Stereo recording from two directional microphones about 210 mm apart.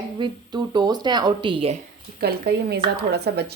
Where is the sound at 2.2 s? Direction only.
50° right (ahead or behind).